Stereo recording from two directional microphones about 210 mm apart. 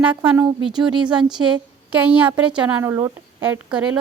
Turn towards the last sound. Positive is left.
turn(degrees=-5)  # may be behind; listen again after turning